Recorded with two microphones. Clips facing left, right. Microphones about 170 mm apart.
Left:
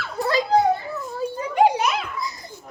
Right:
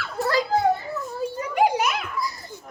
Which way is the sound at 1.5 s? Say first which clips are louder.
Left 3 dB; 30° left (ahead or behind).